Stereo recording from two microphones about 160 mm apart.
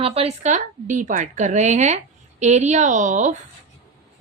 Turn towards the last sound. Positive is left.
turn(degrees=-50)  # may be behind; listen again after turning